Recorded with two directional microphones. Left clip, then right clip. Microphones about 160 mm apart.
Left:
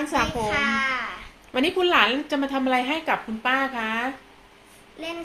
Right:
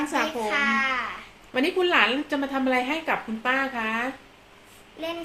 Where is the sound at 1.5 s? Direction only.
15° left (ahead or behind).